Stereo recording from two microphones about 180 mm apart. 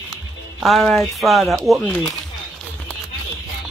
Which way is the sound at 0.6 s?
Centre (ahead or behind).